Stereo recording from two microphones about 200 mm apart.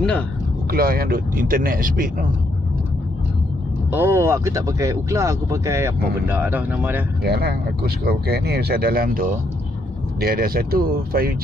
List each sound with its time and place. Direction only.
0.7 s speech: 50° right (ahead or behind)
3.9 s speech: 10° right (ahead or behind)
7.2 s speech: 50° right (ahead or behind)